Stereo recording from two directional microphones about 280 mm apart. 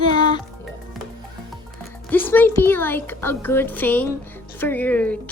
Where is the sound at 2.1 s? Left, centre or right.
Centre.